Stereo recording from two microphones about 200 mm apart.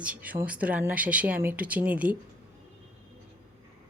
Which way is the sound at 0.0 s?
5° right (ahead or behind).